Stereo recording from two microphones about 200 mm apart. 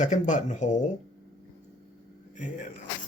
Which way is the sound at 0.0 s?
35° left (ahead or behind).